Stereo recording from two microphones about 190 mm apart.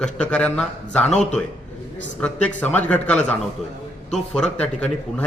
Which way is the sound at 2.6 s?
10° left (ahead or behind).